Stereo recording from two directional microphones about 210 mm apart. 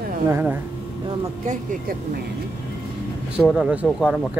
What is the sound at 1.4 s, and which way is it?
Speech, 40° right (ahead or behind).